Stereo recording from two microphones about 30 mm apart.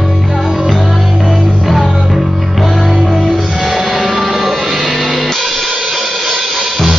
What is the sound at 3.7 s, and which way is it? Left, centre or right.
Music, centre.